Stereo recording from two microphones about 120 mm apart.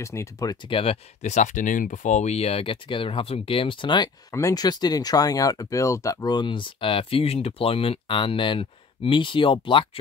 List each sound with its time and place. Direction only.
0.0 s speech: 25° left (ahead or behind); by 0.9 s 45° left (ahead or behind)
1.2 s speech: 85° left; by 4.1 s 40° left (ahead or behind)
4.3 s speech: 25° left (ahead or behind); by 9.8 s 45° left (ahead or behind)